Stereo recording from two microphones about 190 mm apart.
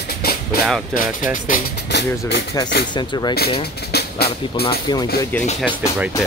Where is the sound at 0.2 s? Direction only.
55° left (ahead or behind).